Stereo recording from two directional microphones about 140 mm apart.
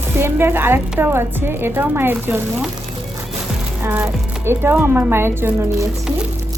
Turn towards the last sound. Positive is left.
turn(degrees=-15)  # may be behind; listen again after turning